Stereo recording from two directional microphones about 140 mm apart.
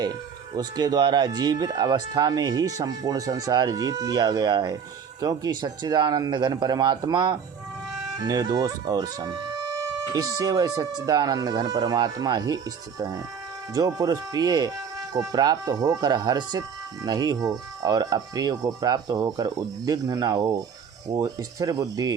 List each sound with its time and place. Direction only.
0.5 s speech: 30° right (ahead or behind)